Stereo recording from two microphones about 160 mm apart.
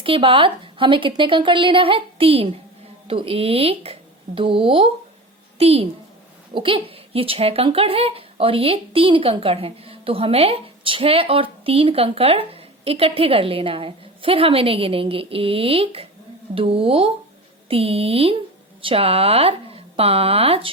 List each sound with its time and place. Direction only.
0.0 s speech: 35° right (ahead or behind)